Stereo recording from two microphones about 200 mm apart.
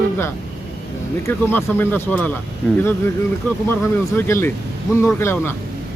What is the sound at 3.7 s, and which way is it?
Speech, 10° left (ahead or behind).